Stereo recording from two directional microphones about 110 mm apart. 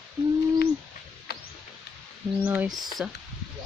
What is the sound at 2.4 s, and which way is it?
Speech, 10° right (ahead or behind).